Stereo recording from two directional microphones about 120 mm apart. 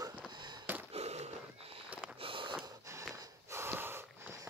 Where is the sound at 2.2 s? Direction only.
45° right (ahead or behind).